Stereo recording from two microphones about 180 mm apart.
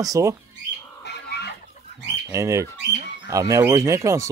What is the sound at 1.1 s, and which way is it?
Chicken, 65° left (ahead or behind).